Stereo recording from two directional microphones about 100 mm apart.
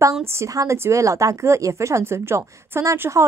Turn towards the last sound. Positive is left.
turn(degrees=-30)  # may be behind; listen again after turning